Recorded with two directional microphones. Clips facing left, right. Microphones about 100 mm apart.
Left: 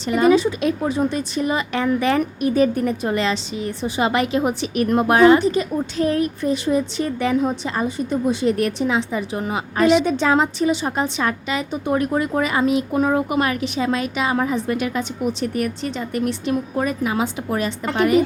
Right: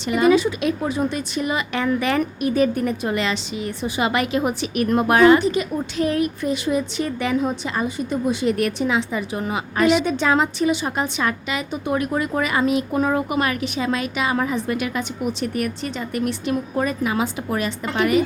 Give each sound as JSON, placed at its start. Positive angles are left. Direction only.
{"t": 0.1, "sound": "a woman's voice", "side_deg": 35}